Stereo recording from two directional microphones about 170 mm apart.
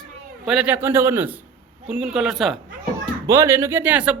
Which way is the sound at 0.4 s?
5° right (ahead or behind).